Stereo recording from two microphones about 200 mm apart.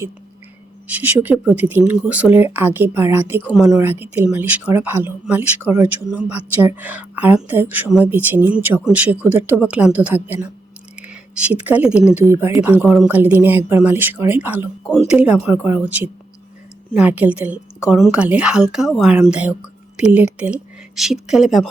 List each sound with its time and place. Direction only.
0.9 s a woman's voice: 10° right (ahead or behind)